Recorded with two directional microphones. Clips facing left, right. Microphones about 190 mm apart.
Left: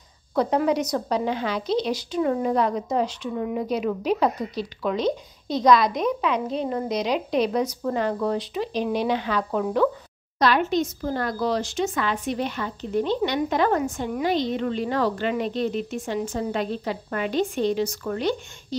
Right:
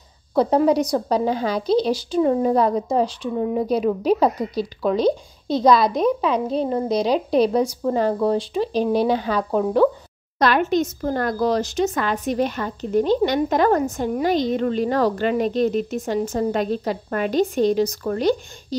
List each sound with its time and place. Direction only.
0.3 s a woman's voice: 30° right (ahead or behind)
10.4 s speech: 50° right (ahead or behind)